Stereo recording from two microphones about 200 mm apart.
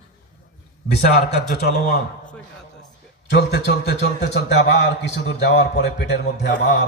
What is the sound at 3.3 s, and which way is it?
A man's voice, 55° left (ahead or behind).